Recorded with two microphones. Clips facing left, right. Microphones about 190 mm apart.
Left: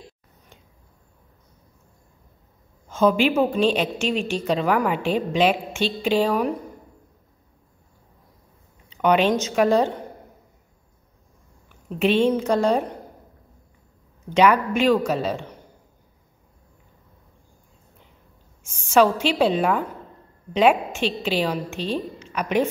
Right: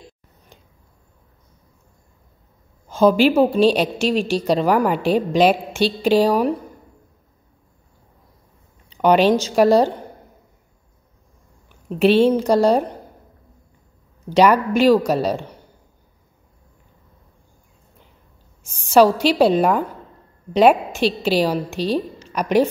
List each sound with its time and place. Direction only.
2.9 s a woman's voice: 35° right (ahead or behind)
8.9 s a woman's voice: 35° right (ahead or behind)
12.0 s a woman's voice: 35° right (ahead or behind)
14.3 s a woman's voice: 35° right (ahead or behind)
18.6 s a woman's voice: 35° right (ahead or behind)